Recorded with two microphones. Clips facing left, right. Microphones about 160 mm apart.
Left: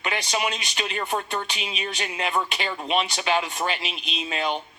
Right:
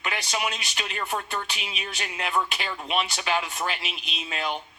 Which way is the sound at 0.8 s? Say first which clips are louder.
Left 3 dB; 20° left (ahead or behind).